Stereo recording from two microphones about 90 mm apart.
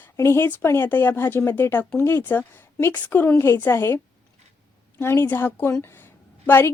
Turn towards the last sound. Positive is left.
turn(degrees=25)  # may be behind; listen again after turning